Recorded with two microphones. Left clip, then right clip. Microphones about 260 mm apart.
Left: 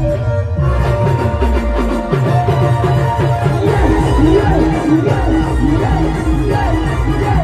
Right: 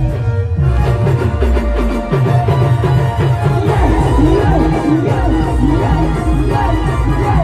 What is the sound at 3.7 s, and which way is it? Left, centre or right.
Music, right.